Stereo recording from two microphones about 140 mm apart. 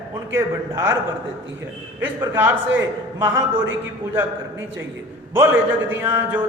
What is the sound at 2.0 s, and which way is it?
Mantra, 15° right (ahead or behind).